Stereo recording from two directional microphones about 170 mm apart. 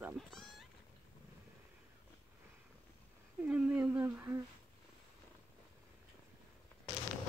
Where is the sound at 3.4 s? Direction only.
10° right (ahead or behind).